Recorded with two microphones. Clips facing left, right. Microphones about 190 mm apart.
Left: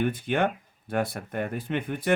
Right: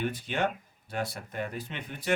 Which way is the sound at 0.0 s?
55° left (ahead or behind).